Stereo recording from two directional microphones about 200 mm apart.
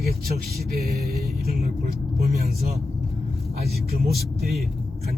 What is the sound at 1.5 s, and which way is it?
Speech, 50° right (ahead or behind).